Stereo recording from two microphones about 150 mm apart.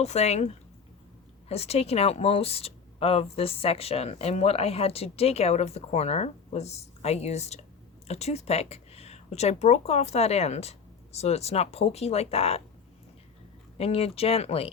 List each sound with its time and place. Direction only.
0.0 s speech: 45° left (ahead or behind)
13.7 s speech: 40° left (ahead or behind)